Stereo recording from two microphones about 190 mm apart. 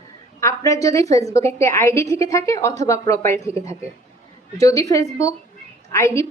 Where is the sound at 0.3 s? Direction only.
15° left (ahead or behind).